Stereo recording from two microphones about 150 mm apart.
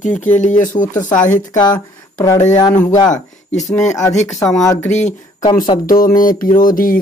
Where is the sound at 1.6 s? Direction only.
25° left (ahead or behind).